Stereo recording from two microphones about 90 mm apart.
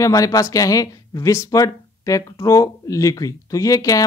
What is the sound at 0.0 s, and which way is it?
Speech, 40° left (ahead or behind).